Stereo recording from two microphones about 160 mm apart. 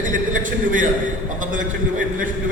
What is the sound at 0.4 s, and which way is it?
A man's voice, 55° right (ahead or behind).